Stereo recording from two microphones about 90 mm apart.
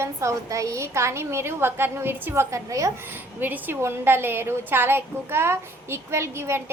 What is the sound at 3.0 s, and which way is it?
A woman's voice, 20° right (ahead or behind).